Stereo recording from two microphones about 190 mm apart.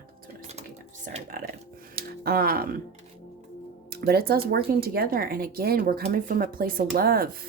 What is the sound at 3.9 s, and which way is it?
Speech, 55° right (ahead or behind).